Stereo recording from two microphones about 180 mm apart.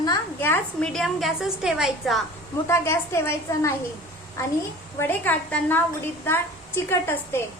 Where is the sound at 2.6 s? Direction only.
15° left (ahead or behind).